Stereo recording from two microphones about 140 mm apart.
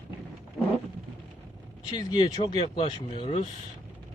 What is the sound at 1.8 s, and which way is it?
Speech, 30° left (ahead or behind).